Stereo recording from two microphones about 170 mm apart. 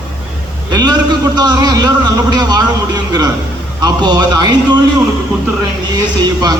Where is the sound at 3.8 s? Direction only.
25° right (ahead or behind).